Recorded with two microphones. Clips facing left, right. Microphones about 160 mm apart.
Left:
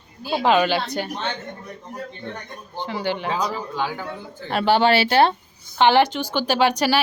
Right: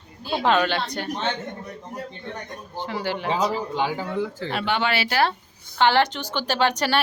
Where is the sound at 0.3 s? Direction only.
5° left (ahead or behind).